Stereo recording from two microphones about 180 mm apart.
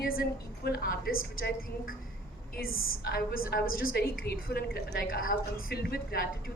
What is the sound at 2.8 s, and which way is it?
A woman's voice, 55° left (ahead or behind).